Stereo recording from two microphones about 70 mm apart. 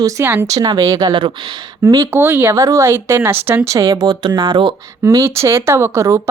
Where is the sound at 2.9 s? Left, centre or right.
Right.